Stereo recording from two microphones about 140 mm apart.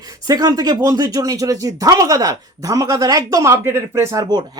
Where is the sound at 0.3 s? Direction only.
25° right (ahead or behind).